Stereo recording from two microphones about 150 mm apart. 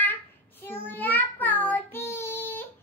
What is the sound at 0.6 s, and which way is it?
Child singing, 15° left (ahead or behind).